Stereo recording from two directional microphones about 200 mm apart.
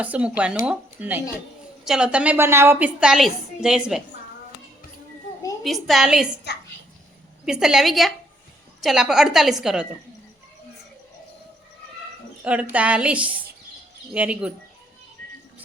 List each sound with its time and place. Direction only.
0.0 s a woman's voice: 5° right (ahead or behind)
5.6 s a woman's voice: centre (ahead or behind)
6.5 s a woman's voice: 60° left (ahead or behind)
7.4 s a woman's voice: 5° right (ahead or behind)
12.7 s a woman's voice: 5° right (ahead or behind)